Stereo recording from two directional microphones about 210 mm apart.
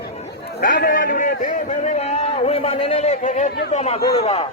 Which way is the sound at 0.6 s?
45° left (ahead or behind).